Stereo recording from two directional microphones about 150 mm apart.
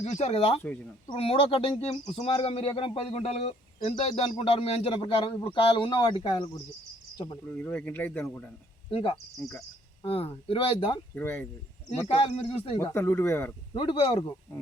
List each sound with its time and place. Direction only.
0.0 s speech: 45° left (ahead or behind); by 6.3 s 30° left (ahead or behind)
7.4 s speech: 10° left (ahead or behind)
8.9 s speech: 35° left (ahead or behind)
11.1 s speech: 15° left (ahead or behind)
12.0 s speech: 45° left (ahead or behind)
12.8 s speech: 15° left (ahead or behind)
13.7 s speech: 35° left (ahead or behind)